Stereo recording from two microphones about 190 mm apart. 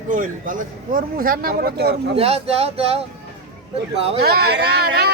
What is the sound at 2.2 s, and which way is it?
Speech, 30° right (ahead or behind).